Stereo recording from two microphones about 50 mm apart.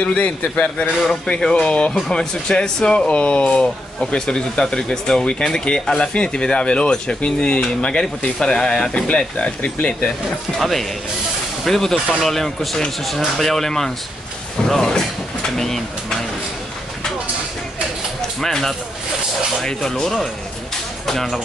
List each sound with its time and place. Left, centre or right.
0.0 s speech: left
1.0 s speech: centre
3.1 s speech: left
10.6 s speech: centre
18.4 s speech: centre